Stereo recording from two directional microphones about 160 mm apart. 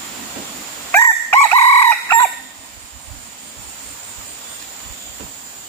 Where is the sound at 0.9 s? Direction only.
15° left (ahead or behind).